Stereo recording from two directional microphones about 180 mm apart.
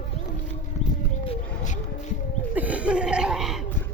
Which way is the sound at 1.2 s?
35° left (ahead or behind).